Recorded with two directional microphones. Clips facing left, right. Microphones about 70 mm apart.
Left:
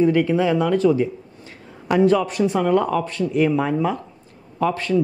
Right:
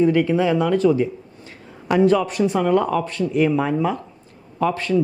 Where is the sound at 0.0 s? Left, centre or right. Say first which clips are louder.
Even; right.